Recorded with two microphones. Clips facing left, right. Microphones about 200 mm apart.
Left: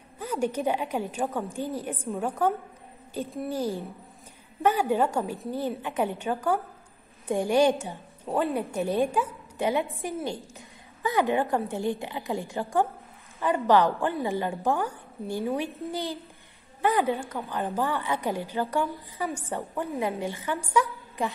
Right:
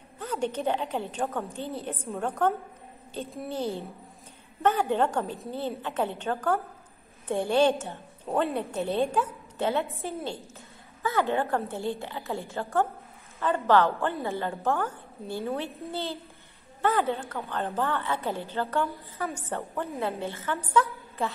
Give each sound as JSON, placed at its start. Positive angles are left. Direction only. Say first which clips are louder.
{"t": 0.2, "sound": "a woman's voice", "louder": "left 2 dB", "side_deg": 10}